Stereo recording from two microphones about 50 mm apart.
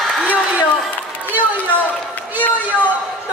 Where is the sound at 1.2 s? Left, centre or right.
Right.